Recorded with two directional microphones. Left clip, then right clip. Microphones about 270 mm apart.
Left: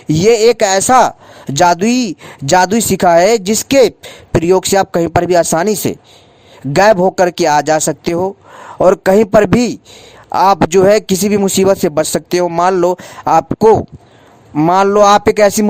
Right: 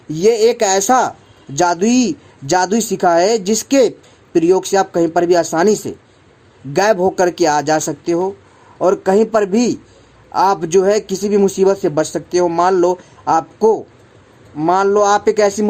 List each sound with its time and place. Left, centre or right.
0.1 s speech: left